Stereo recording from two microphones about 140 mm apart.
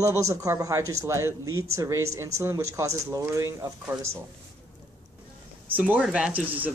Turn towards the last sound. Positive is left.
turn(degrees=-10)  # may be behind; listen again after turning